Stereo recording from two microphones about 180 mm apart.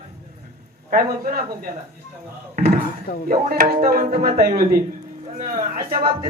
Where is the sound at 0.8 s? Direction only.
50° right (ahead or behind).